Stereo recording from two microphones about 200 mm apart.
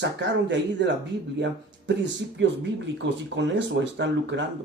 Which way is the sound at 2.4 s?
65° right (ahead or behind).